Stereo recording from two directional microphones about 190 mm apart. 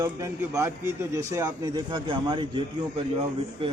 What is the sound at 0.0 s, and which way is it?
A man's voice, 15° right (ahead or behind).